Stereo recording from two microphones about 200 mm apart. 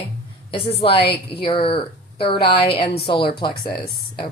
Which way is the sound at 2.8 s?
25° left (ahead or behind).